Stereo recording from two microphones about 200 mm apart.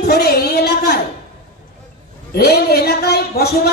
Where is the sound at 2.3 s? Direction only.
50° left (ahead or behind).